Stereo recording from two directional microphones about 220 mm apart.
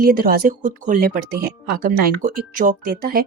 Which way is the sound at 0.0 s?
40° right (ahead or behind).